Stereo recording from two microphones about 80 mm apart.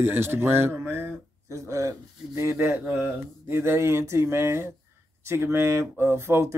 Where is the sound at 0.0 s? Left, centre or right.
Right.